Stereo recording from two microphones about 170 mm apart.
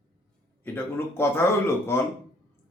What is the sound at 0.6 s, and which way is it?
Speech, 15° left (ahead or behind).